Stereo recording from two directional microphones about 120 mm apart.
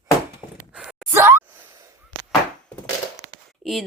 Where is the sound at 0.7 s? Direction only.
5° right (ahead or behind).